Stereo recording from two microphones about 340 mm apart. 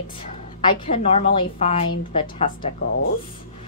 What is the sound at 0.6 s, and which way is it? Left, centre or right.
A woman's voice, centre.